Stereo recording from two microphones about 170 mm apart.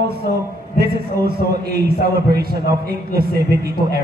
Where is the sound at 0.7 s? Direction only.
65° right (ahead or behind).